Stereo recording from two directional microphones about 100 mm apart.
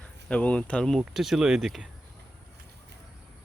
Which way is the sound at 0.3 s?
15° left (ahead or behind).